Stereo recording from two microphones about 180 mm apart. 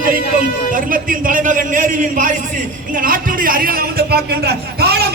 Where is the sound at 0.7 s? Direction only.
50° right (ahead or behind).